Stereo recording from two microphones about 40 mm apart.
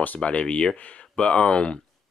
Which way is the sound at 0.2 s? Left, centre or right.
Left.